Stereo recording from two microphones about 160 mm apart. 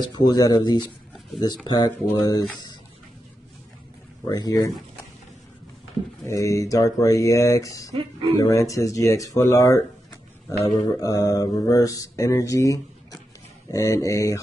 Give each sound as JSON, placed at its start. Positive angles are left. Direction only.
{"t": 0.3, "sound": "speech", "side_deg": 25}
{"t": 4.2, "sound": "speech", "side_deg": 25}
{"t": 6.2, "sound": "speech", "side_deg": 20}
{"t": 10.6, "sound": "mantra", "side_deg": 30}
{"t": 11.0, "sound": "speech", "side_deg": 20}